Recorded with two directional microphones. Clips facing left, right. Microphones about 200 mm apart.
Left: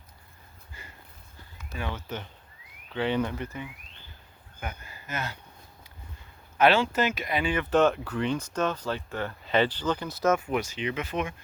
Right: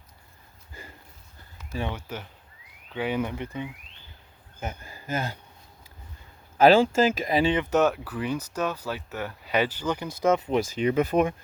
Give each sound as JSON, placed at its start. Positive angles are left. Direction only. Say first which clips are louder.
{"t": 1.9, "sound": "speech", "louder": "even", "side_deg": -10}
{"t": 4.6, "sound": "speech", "louder": "right 3 dB", "side_deg": -30}
{"t": 6.6, "sound": "speech", "louder": "right 5 dB", "side_deg": -35}
{"t": 7.6, "sound": "speech", "louder": "even", "side_deg": -10}
{"t": 10.8, "sound": "speech", "louder": "right 8 dB", "side_deg": -40}